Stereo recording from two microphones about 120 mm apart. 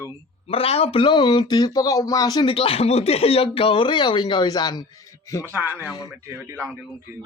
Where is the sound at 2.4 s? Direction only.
50° left (ahead or behind); by 5.5 s 25° left (ahead or behind).